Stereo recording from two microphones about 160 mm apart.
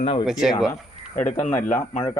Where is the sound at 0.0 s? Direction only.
35° left (ahead or behind).